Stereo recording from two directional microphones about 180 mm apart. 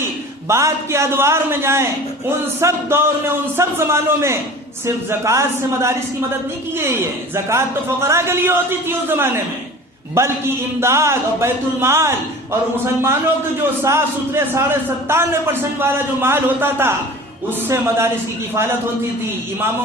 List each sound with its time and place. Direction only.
0.0 s a man's voice: 15° right (ahead or behind)